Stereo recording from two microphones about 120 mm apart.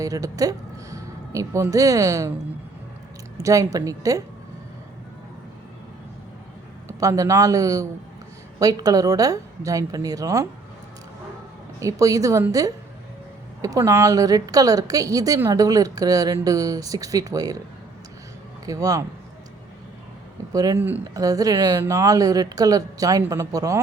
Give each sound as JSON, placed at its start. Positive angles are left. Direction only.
{"t": 0.0, "sound": "speech", "side_deg": -30}
{"t": 3.4, "sound": "speech", "side_deg": -25}
{"t": 6.8, "sound": "speech", "side_deg": -25}
{"t": 11.8, "sound": "speech", "side_deg": -25}
{"t": 18.6, "sound": "speech", "side_deg": -30}
{"t": 20.5, "sound": "speech", "side_deg": -30}
{"t": 20.7, "sound": "speech", "side_deg": -15}
{"t": 21.0, "sound": "speech", "side_deg": -30}